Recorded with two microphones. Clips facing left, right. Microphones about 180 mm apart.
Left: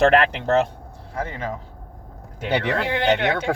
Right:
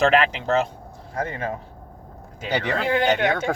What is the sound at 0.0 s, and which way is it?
Speech, 60° left (ahead or behind).